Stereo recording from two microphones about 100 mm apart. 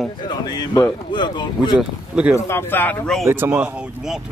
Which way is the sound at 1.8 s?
10° right (ahead or behind).